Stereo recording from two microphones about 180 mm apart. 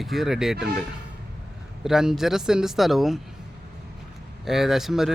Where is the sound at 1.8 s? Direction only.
5° right (ahead or behind).